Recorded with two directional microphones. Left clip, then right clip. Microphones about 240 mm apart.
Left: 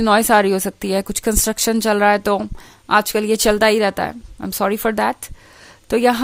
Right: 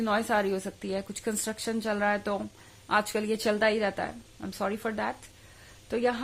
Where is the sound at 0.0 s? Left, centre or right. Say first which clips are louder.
Left 13 dB; left.